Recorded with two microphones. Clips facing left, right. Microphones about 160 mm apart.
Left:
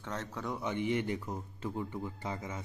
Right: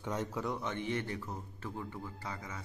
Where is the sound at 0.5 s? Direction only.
10° left (ahead or behind).